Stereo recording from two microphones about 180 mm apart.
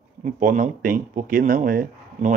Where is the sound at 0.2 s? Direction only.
50° right (ahead or behind).